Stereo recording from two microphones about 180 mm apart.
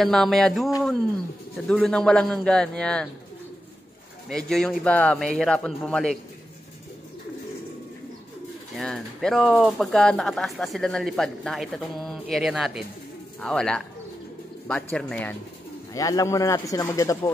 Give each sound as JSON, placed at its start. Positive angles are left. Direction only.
{"t": 0.0, "sound": "speech", "side_deg": 0}
{"t": 4.3, "sound": "speech", "side_deg": 5}
{"t": 8.7, "sound": "speech", "side_deg": 5}
{"t": 15.9, "sound": "speech", "side_deg": 20}